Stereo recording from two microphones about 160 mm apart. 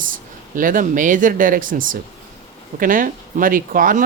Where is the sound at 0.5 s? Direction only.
60° right (ahead or behind).